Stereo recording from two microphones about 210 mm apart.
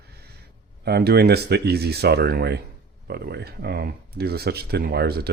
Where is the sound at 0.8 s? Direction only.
50° right (ahead or behind).